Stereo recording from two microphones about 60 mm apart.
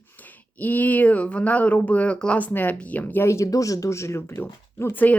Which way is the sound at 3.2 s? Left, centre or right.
Left.